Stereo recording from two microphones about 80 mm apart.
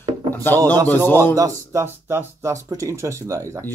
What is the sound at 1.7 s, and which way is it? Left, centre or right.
Speech, right.